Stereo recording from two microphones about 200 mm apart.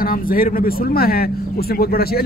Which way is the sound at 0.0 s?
45° left (ahead or behind).